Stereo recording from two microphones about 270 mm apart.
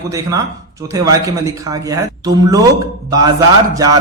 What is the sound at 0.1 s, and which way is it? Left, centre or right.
Speech, centre.